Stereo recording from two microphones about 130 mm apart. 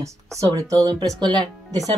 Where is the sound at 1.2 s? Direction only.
35° right (ahead or behind).